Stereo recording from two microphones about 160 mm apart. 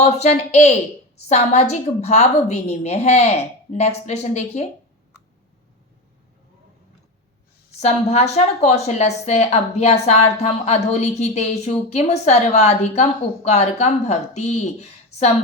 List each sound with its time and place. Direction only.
0.0 s a woman's voice: 45° left (ahead or behind)
7.8 s a woman's voice: 45° left (ahead or behind)